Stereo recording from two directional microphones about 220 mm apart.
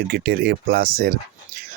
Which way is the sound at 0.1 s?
45° right (ahead or behind).